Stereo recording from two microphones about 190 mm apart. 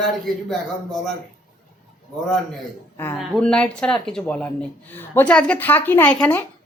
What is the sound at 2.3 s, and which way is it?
A man's voice, 10° left (ahead or behind).